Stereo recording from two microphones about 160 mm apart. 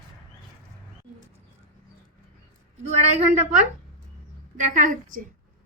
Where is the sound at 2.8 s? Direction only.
45° right (ahead or behind).